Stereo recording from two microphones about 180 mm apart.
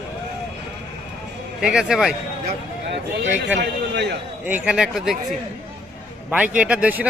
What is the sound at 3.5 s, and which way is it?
Speech, 70° right (ahead or behind).